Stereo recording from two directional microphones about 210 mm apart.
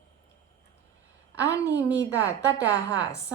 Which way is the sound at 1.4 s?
15° left (ahead or behind).